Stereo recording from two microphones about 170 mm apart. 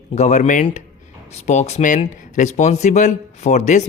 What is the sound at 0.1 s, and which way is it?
Speech, 45° left (ahead or behind).